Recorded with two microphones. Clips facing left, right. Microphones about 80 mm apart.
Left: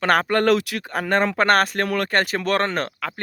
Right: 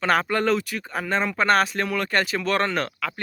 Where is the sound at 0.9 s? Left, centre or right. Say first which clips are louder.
Left 5 dB; left.